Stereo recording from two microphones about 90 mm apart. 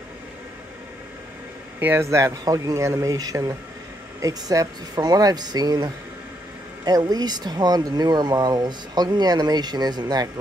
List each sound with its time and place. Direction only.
1.8 s speech: 20° right (ahead or behind)
2.0 s speech: 35° right (ahead or behind)